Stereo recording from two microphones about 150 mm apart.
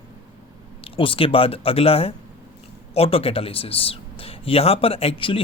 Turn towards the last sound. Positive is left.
turn(degrees=35)  # may be behind; listen again after turning